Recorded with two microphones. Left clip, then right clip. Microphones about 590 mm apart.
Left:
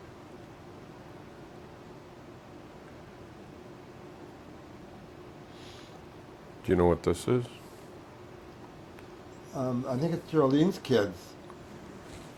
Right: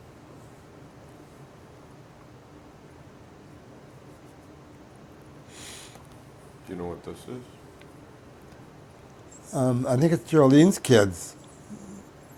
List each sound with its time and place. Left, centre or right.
6.7 s speech: left
9.6 s speech: right